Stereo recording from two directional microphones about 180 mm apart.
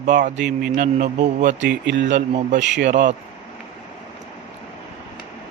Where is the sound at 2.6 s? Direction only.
80° right.